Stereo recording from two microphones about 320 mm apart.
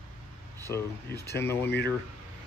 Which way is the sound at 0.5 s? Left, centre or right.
Centre.